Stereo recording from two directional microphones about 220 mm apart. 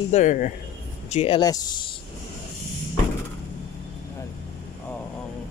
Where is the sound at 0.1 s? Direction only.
35° left (ahead or behind); by 1.7 s 15° left (ahead or behind).